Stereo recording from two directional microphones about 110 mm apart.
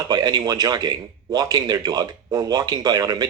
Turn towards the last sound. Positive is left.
turn(degrees=-35)  # may be behind; listen again after turning